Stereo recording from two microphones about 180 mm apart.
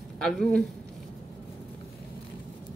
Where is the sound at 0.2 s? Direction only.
5° left (ahead or behind).